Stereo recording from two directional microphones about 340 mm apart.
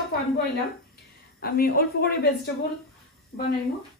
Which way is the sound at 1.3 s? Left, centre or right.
Left.